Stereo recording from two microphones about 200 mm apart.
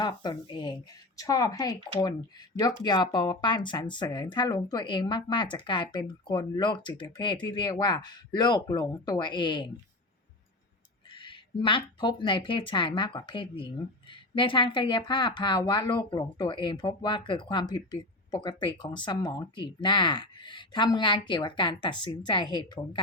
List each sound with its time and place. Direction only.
0.0 s speech: 20° left (ahead or behind)
11.1 s speech: 25° left (ahead or behind)